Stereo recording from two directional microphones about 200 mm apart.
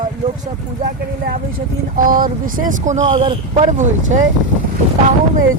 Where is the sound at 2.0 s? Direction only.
45° right (ahead or behind).